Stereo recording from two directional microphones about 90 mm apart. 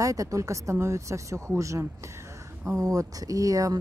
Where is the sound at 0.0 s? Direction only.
40° right (ahead or behind).